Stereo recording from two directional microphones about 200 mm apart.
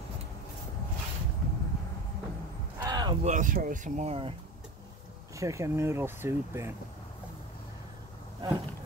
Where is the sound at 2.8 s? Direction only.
20° right (ahead or behind).